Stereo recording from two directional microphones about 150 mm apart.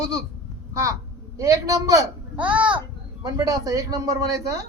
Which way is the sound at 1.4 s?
20° right (ahead or behind).